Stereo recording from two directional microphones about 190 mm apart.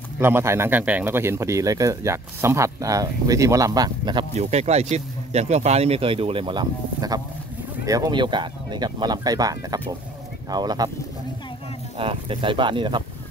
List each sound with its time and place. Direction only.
0.2 s speech: 15° right (ahead or behind)
4.4 s speech: 35° right (ahead or behind)
12.0 s speech: 30° right (ahead or behind)